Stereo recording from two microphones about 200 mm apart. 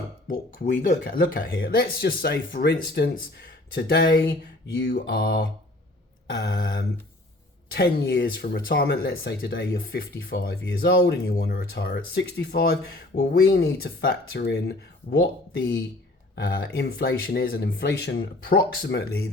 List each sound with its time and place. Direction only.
0.3 s speech: 45° left (ahead or behind)
4.8 s mantra: 55° left (ahead or behind)
6.3 s speech: 50° left (ahead or behind)